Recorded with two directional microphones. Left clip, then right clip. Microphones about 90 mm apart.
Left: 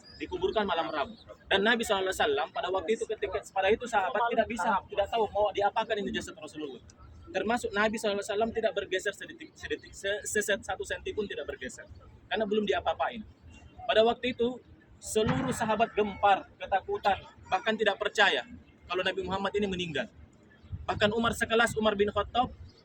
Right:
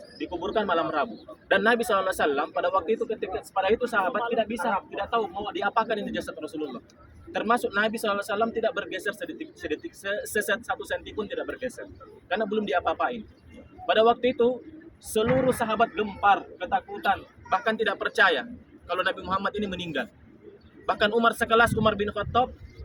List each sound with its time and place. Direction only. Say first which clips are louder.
0.4 s a man's voice: right 4 dB; 25° left (ahead or behind)
12.3 s a man's voice: right 3 dB; 35° left (ahead or behind)